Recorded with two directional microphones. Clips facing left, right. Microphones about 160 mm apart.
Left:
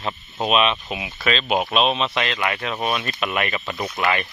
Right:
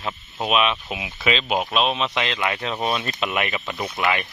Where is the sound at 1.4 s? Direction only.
Centre (ahead or behind).